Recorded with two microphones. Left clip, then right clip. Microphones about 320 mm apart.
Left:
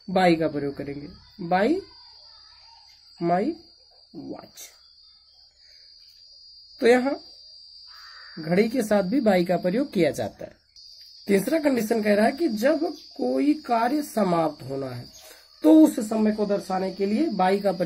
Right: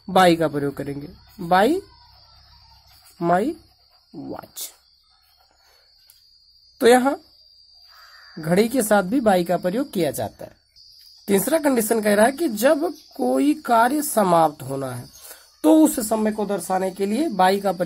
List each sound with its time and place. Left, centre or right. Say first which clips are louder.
0.0 s speech: right 5 dB; right
3.2 s speech: right 4 dB; right
6.8 s speech: right 4 dB; right
8.6 s speech: right 4 dB; right
11.9 s speech: right 5 dB; right